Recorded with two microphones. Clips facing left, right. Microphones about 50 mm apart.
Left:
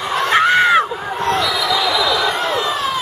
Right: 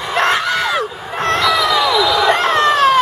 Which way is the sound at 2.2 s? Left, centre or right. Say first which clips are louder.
Right 6 dB; right.